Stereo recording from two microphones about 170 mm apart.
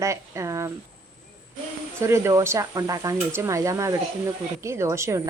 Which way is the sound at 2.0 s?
15° right (ahead or behind).